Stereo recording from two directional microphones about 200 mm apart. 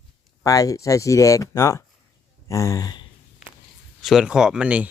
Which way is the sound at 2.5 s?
15° left (ahead or behind).